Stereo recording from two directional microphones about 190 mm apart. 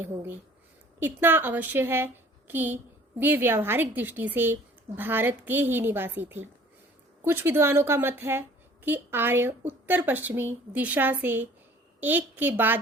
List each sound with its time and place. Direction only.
0.0 s a woman's voice: 10° right (ahead or behind)